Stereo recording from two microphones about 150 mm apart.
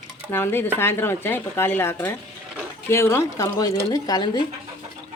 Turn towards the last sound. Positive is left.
turn(degrees=25)  # may be behind; listen again after turning